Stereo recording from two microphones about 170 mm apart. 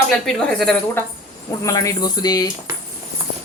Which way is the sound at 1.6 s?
20° left (ahead or behind).